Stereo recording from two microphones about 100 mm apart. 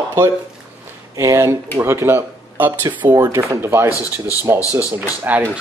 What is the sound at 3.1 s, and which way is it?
Speech, 40° right (ahead or behind).